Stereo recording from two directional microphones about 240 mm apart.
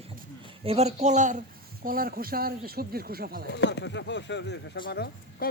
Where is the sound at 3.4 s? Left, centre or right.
Left.